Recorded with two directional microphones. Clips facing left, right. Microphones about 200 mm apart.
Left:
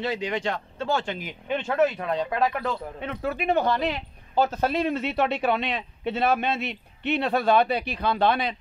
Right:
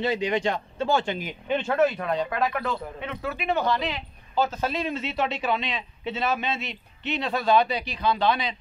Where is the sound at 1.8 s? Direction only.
25° left (ahead or behind).